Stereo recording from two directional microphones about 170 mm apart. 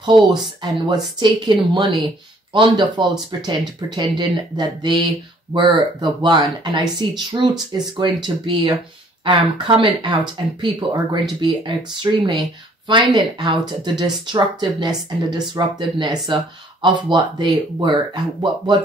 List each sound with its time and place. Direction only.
0.0 s speech: 25° right (ahead or behind)